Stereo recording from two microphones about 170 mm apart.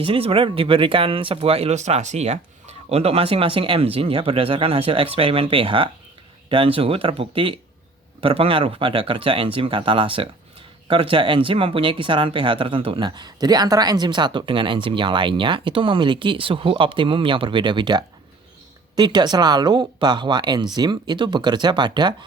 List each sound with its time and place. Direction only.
0.0 s speech: 30° right (ahead or behind)